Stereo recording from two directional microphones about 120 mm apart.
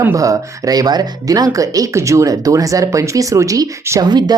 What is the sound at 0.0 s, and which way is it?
Speech, 25° right (ahead or behind).